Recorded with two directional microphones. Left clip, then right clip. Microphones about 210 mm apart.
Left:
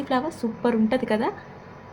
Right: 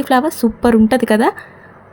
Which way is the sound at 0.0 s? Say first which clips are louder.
Right 11 dB; 50° right (ahead or behind).